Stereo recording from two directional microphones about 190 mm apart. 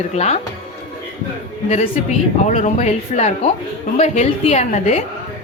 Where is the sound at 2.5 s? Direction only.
35° left (ahead or behind).